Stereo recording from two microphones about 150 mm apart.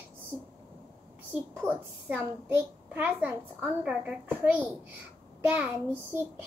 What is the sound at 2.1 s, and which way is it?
A child's voice, 15° right (ahead or behind).